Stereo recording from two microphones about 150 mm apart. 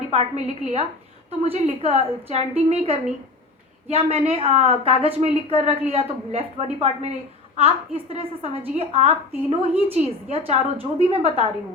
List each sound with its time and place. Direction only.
0.1 s a woman's voice: 45° right (ahead or behind)